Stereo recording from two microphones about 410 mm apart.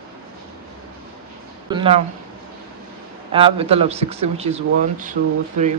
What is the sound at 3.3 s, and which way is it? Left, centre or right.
Speech, centre.